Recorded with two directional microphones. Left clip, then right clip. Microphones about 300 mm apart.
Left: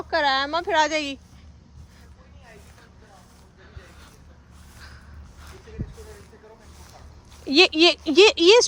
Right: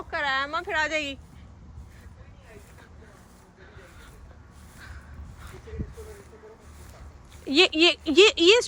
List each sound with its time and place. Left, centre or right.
0.1 s a woman's voice: centre
7.4 s speech: centre